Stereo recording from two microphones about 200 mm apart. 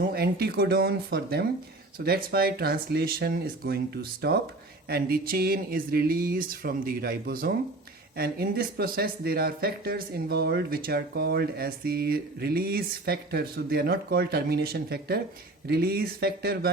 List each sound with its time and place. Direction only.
0.0 s speech: 50° right (ahead or behind)